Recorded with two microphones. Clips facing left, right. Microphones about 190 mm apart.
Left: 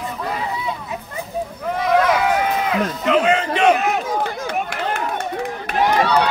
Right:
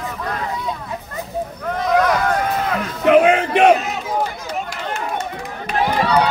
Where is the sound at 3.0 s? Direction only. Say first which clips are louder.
Right 6 dB; 55° right (ahead or behind).